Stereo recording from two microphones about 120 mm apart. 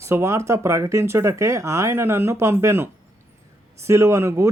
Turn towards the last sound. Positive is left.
turn(degrees=-25)  # may be behind; listen again after turning